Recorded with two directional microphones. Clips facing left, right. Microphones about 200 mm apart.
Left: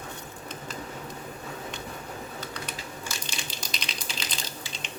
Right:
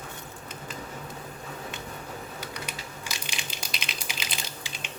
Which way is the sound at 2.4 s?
10° right (ahead or behind).